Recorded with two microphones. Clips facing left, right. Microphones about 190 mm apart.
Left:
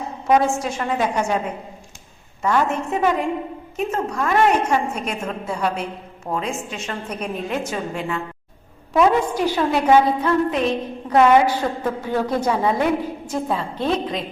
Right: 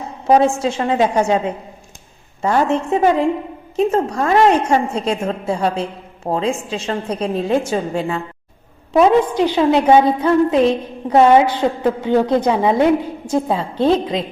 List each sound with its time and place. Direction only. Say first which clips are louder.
0.3 s a woman's voice: right 4 dB; 30° right (ahead or behind)
2.4 s a woman's voice: right 4 dB; 35° right (ahead or behind)